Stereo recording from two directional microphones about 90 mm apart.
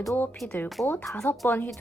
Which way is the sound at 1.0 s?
10° left (ahead or behind).